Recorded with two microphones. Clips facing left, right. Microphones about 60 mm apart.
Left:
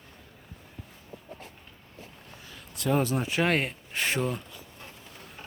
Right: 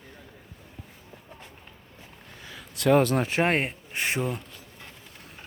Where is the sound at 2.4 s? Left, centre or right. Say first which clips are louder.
Right 7 dB; right.